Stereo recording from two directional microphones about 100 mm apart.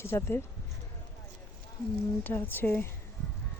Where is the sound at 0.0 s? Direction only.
25° left (ahead or behind).